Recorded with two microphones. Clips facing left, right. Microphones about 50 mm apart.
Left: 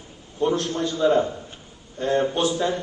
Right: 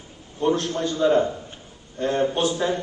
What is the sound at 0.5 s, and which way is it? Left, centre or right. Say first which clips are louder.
Speech: even; right.